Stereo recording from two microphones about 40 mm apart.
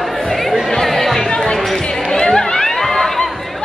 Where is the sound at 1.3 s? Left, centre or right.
Centre.